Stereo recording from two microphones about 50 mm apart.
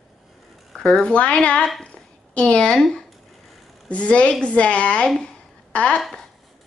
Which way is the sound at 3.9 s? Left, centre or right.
Left.